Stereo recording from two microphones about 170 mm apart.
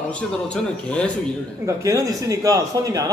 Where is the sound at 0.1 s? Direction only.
5° left (ahead or behind).